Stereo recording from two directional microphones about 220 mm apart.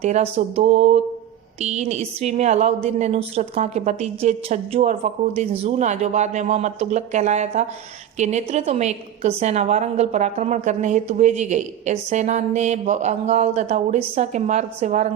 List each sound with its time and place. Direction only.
0.0 s a woman's voice: 30° right (ahead or behind)